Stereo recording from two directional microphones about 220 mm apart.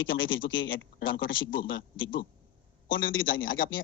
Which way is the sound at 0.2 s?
60° left (ahead or behind).